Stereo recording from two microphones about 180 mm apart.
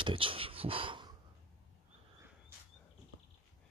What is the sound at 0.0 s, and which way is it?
Speech, 30° right (ahead or behind).